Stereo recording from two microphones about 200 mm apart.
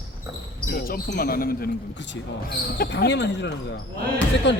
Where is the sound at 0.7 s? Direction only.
50° left (ahead or behind).